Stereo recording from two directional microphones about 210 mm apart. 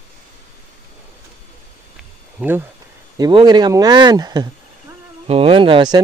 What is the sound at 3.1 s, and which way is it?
Speech, 20° right (ahead or behind).